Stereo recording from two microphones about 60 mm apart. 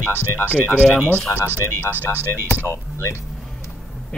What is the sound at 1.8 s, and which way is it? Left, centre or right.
Speech, left.